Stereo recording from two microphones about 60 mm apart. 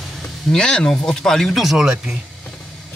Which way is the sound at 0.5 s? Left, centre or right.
Centre.